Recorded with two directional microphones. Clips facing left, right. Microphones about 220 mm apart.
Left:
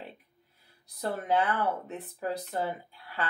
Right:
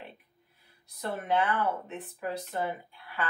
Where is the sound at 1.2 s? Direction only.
35° left (ahead or behind).